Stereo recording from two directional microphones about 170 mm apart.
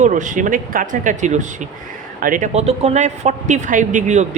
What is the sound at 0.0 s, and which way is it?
Speech, 50° right (ahead or behind).